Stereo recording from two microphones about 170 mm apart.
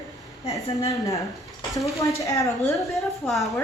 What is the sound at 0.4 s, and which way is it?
A woman's voice, 20° left (ahead or behind).